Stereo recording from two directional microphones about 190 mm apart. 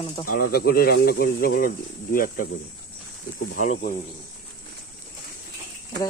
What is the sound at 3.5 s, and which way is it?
Speech, 45° left (ahead or behind).